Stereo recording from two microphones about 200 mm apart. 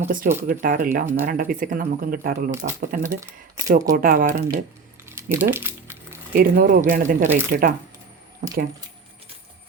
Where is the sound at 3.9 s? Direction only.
45° right (ahead or behind).